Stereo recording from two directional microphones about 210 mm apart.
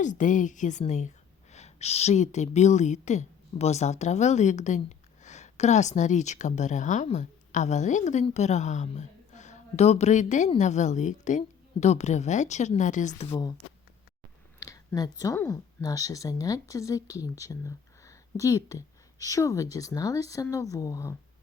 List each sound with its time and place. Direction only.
0.0 s a woman's voice: 35° left (ahead or behind)
13.3 s speech: 20° left (ahead or behind)
14.6 s a sound: 15° left (ahead or behind)
15.2 s a woman's voice: 15° left (ahead or behind)